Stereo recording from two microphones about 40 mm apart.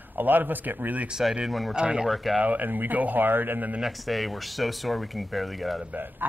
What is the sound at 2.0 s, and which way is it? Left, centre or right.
Speech, centre.